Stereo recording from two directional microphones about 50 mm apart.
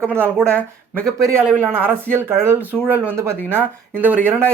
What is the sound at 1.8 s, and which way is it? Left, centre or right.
Speech, right.